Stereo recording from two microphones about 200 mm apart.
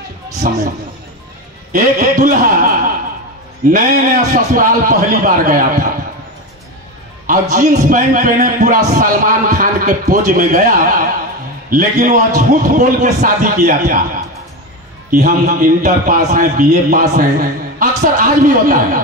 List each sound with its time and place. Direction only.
0.5 s a man's voice: 40° right (ahead or behind)
1.7 s a man's voice: 40° right (ahead or behind)
7.2 s a man's voice: 40° right (ahead or behind)
15.0 s a man's voice: 40° right (ahead or behind)